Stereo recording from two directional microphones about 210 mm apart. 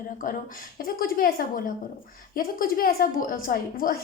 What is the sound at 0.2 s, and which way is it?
A woman's voice, 40° left (ahead or behind).